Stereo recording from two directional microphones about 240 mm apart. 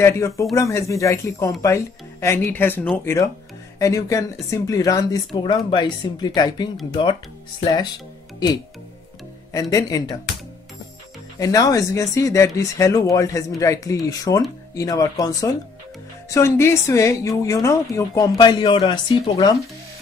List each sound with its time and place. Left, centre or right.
0.0 s speech: centre
9.5 s speech: centre
11.3 s speech: centre